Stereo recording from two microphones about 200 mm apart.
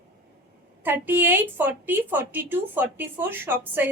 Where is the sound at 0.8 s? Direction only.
10° right (ahead or behind).